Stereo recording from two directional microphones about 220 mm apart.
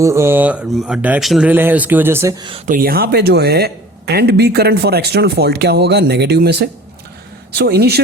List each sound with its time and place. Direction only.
0.0 s speech: 15° right (ahead or behind)
2.6 s speech: 40° right (ahead or behind)